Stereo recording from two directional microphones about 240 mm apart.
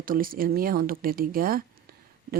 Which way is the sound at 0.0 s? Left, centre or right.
Right.